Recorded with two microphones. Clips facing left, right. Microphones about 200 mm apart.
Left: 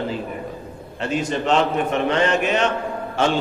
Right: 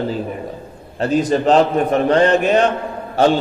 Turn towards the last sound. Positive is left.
turn(degrees=-35)  # may be behind; listen again after turning